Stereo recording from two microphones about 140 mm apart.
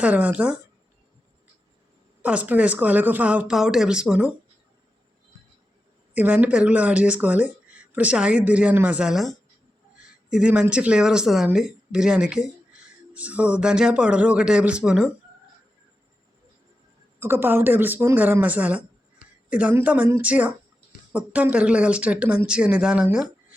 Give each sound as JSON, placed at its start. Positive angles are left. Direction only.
{"t": 0.0, "sound": "speech", "side_deg": -10}
{"t": 2.2, "sound": "speech", "side_deg": -10}
{"t": 6.1, "sound": "speech", "side_deg": -10}
{"t": 17.2, "sound": "speech", "side_deg": -15}